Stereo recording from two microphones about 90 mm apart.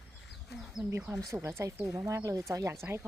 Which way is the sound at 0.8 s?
30° right (ahead or behind).